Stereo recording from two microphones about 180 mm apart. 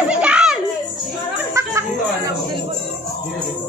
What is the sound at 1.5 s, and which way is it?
Music, 15° right (ahead or behind).